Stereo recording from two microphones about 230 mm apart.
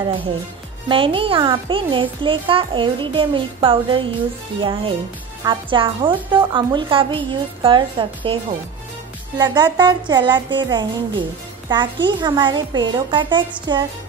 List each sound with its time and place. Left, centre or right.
0.8 s a child's voice: right
9.4 s a child's voice: centre